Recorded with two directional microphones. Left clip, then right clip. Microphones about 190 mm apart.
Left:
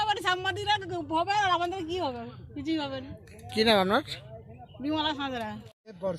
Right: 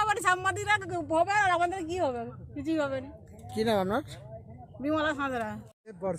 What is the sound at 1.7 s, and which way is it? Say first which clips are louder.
Speech: even; 50° right (ahead or behind).